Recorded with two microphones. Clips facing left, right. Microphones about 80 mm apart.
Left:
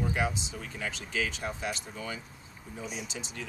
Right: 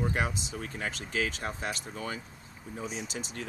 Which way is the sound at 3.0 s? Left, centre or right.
Right.